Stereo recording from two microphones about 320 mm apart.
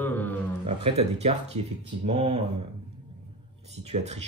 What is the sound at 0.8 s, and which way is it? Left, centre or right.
A man's voice, centre.